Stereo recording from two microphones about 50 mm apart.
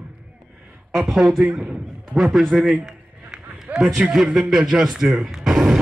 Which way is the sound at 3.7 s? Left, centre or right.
Right.